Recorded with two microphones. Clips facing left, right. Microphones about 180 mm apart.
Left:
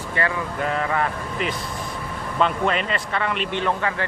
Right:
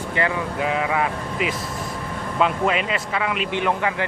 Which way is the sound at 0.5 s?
5° right (ahead or behind).